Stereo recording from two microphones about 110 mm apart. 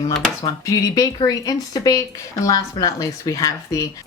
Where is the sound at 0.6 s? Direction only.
30° left (ahead or behind).